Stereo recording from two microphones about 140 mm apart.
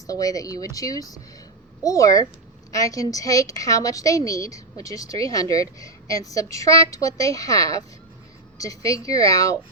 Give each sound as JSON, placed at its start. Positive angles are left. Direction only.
{"t": 0.1, "sound": "a woman's voice", "side_deg": 25}